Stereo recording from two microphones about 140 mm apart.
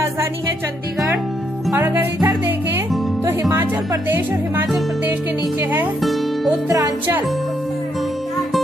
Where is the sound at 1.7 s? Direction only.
15° right (ahead or behind).